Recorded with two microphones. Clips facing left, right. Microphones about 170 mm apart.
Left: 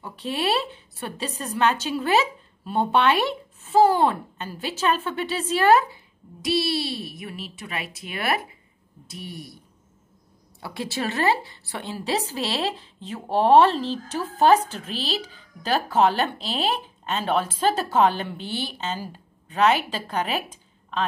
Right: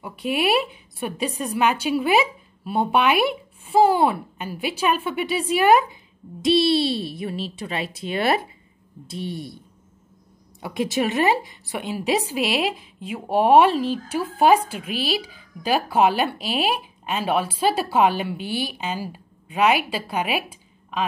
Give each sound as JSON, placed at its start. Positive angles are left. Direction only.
{"t": 0.0, "sound": "a woman's voice", "side_deg": -10}
{"t": 6.4, "sound": "speech", "side_deg": -25}
{"t": 10.6, "sound": "a woman's voice", "side_deg": -15}